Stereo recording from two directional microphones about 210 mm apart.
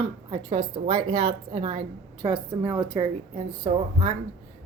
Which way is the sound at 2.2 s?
10° right (ahead or behind).